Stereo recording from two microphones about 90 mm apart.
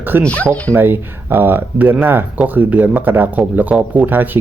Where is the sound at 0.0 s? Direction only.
20° right (ahead or behind).